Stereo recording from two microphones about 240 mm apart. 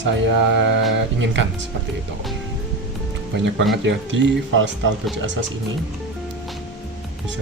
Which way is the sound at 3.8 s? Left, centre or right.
Right.